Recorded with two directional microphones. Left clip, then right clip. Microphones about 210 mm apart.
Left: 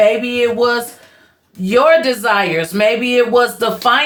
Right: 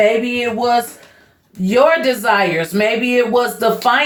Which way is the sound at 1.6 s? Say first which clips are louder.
Left 2 dB; 30° left (ahead or behind).